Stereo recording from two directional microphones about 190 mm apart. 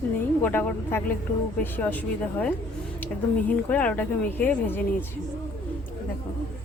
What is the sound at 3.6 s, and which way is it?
A woman's voice, 5° left (ahead or behind).